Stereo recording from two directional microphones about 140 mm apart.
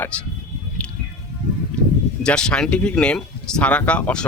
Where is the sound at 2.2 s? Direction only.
5° left (ahead or behind).